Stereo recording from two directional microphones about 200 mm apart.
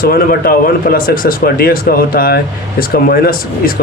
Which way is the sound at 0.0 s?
45° left (ahead or behind).